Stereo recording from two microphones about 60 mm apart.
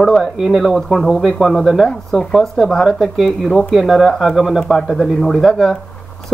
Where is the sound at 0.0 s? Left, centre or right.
Centre.